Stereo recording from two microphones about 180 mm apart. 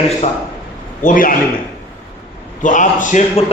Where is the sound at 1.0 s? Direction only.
50° left (ahead or behind).